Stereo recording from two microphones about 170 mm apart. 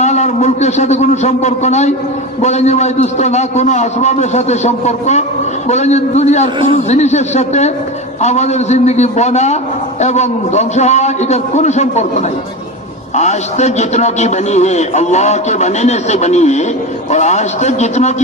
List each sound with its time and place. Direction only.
0.0 s a man's voice: 40° left (ahead or behind)